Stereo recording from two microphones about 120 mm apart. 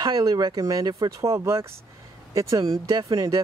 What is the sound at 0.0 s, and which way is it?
Speech, 35° right (ahead or behind).